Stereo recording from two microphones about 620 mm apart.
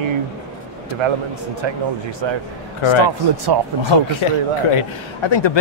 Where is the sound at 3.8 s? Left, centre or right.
Left.